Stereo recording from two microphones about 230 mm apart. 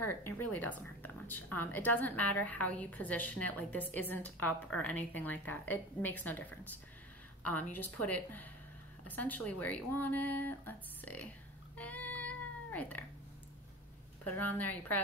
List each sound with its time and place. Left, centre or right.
0.0 s a woman's voice: centre
11.7 s child singing: centre
14.3 s a woman's voice: centre